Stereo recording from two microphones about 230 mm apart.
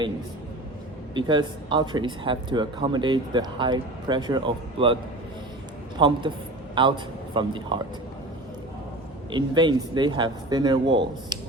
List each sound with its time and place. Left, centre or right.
1.1 s speech: centre
6.0 s a man's voice: right
9.3 s speech: centre